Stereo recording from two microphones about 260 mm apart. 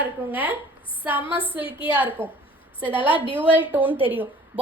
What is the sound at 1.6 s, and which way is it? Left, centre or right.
Speech, centre.